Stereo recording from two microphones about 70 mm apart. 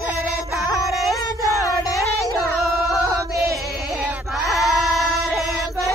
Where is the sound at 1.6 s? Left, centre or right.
Left.